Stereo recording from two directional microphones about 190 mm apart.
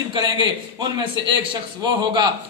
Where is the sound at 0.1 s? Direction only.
25° right (ahead or behind).